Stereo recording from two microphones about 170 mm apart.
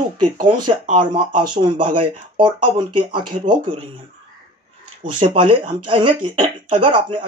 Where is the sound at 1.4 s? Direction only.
25° right (ahead or behind).